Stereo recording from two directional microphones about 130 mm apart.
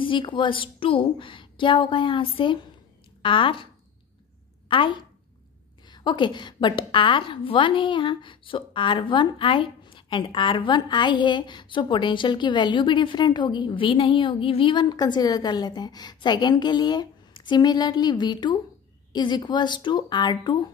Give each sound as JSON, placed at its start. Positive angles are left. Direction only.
{"t": 0.0, "sound": "a woman's voice", "side_deg": 40}
{"t": 4.6, "sound": "a woman's voice", "side_deg": 40}